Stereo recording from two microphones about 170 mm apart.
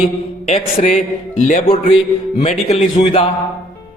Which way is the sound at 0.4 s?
40° left (ahead or behind).